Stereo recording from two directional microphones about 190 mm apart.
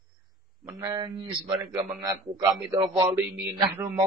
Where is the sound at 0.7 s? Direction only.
20° right (ahead or behind).